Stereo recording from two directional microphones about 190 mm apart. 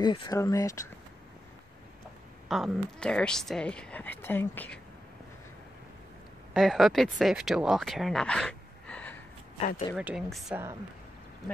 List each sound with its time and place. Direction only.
0.0 s speech: 25° left (ahead or behind)
2.4 s a woman's voice: centre (ahead or behind)
6.5 s speech: centre (ahead or behind)
9.9 s a woman's voice: 5° right (ahead or behind)